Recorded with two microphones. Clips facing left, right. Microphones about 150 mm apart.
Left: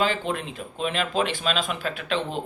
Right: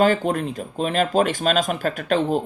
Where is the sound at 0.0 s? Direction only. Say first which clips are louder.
Right 7 dB; 45° right (ahead or behind).